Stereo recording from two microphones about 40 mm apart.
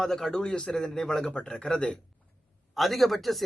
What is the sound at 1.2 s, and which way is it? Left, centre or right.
Speech, left.